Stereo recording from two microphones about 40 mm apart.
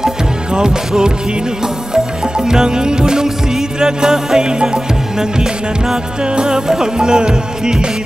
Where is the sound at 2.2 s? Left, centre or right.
Centre.